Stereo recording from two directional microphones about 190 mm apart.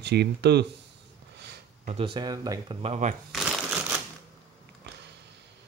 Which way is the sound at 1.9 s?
30° right (ahead or behind).